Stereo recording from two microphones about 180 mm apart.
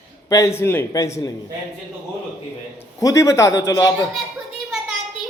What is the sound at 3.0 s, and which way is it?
Speech, 20° left (ahead or behind).